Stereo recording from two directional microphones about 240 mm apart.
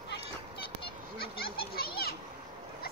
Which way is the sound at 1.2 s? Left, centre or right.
Left.